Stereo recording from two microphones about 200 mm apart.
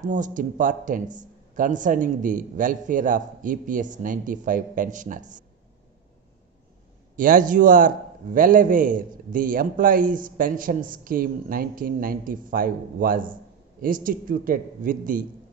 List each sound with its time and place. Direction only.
0.0 s a man's voice: 40° right (ahead or behind)
7.2 s a man's voice: 45° right (ahead or behind)